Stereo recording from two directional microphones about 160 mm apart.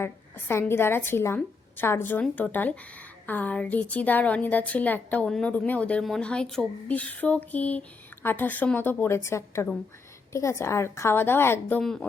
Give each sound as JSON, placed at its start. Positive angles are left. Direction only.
{"t": 0.0, "sound": "a woman's voice", "side_deg": 15}
{"t": 11.8, "sound": "a woman's voice", "side_deg": 5}